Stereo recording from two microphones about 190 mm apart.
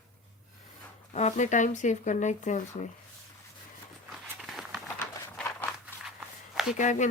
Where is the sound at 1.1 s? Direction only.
40° left (ahead or behind).